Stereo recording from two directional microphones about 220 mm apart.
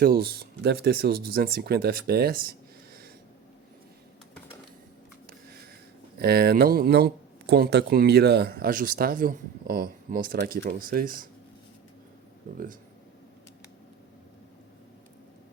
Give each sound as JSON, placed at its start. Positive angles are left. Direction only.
{"t": 0.0, "sound": "speech", "side_deg": -45}
{"t": 6.1, "sound": "speech", "side_deg": -45}